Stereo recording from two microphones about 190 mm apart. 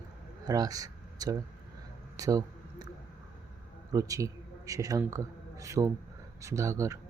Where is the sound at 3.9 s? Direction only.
15° right (ahead or behind).